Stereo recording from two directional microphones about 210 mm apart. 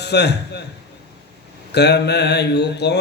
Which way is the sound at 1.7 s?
55° left (ahead or behind).